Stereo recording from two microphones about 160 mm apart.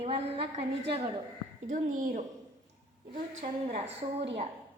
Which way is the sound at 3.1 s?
45° right (ahead or behind).